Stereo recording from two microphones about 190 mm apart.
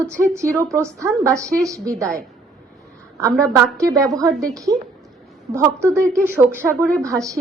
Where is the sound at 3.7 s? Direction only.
15° right (ahead or behind).